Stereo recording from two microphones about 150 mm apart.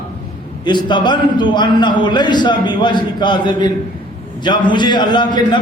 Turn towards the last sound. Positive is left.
turn(degrees=30)  # may be behind; listen again after turning